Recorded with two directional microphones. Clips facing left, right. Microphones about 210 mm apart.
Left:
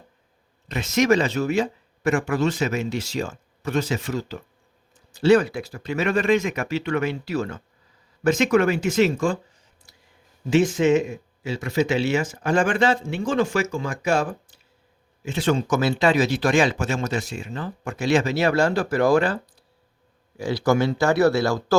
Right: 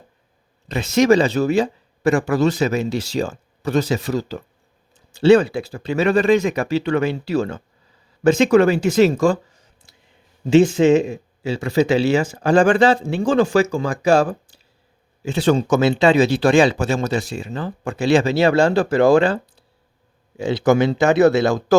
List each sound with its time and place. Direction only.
0.7 s speech: 30° right (ahead or behind)